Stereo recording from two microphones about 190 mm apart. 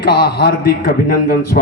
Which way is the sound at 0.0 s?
60° left (ahead or behind).